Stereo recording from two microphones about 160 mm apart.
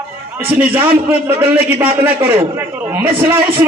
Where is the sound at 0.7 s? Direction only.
10° right (ahead or behind).